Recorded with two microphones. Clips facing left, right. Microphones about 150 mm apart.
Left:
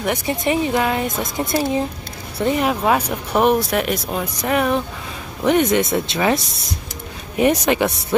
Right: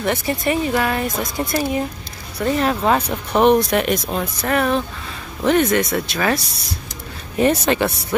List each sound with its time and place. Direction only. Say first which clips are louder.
0.0 s speech: even; 15° left (ahead or behind)